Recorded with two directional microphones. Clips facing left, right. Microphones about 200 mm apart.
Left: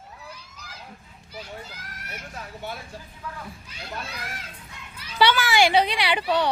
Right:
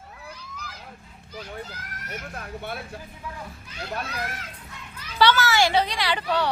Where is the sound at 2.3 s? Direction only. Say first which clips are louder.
Even; 60° right (ahead or behind).